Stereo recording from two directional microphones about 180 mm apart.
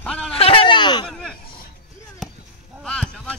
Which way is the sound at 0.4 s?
30° left (ahead or behind).